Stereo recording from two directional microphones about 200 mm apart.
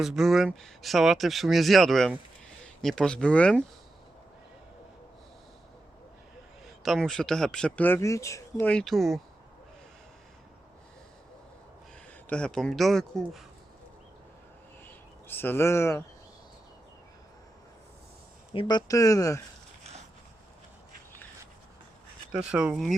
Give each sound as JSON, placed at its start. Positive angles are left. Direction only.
{"t": 0.0, "sound": "speech", "side_deg": 0}
{"t": 6.7, "sound": "speech", "side_deg": 0}
{"t": 12.3, "sound": "speech", "side_deg": 5}
{"t": 15.3, "sound": "speech", "side_deg": 10}
{"t": 18.5, "sound": "speech", "side_deg": 20}
{"t": 22.3, "sound": "speech", "side_deg": -5}